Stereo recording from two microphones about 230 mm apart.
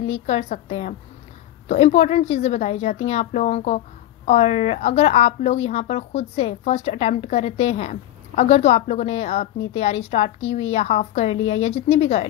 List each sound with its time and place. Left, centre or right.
0.3 s a woman's voice: left